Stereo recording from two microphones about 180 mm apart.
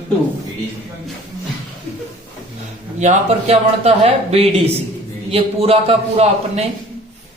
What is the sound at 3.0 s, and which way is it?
A woman's voice, 40° right (ahead or behind).